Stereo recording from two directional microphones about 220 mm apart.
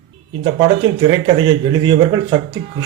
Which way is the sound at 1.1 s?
20° right (ahead or behind).